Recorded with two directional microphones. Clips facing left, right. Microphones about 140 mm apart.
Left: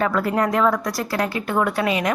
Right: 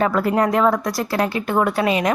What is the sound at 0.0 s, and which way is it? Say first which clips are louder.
A woman's voice: right 2 dB; 25° right (ahead or behind).